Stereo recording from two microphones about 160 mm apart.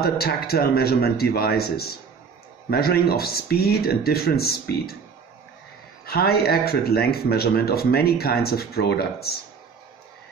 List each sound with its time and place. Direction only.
0.0 s speech: 75° left (ahead or behind)
6.0 s speech: 75° left (ahead or behind)